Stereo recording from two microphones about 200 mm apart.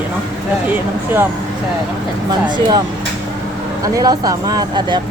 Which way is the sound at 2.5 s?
20° right (ahead or behind).